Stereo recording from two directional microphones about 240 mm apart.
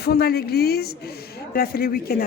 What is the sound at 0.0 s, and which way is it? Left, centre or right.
A man's voice, left.